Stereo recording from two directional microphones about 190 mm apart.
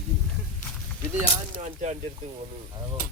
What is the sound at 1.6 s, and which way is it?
Speech, 35° right (ahead or behind).